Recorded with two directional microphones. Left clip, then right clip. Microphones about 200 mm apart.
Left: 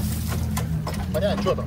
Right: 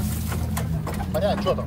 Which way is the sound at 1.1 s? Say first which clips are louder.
Right 1 dB; 25° right (ahead or behind).